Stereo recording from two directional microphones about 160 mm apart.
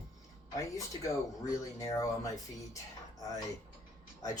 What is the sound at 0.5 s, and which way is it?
Speech, 20° left (ahead or behind).